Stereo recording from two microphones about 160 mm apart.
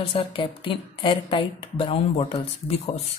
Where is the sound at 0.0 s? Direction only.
35° left (ahead or behind).